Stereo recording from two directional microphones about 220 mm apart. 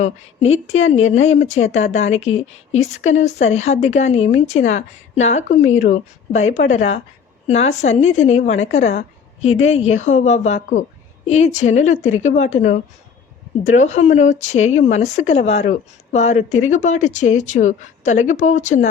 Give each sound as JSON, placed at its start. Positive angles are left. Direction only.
{"t": 0.0, "sound": "a woman's voice", "side_deg": 30}